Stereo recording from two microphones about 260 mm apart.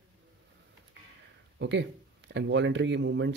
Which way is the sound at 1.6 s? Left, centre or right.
Right.